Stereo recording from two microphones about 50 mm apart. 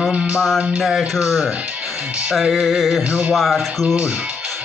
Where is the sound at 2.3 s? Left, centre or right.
Centre.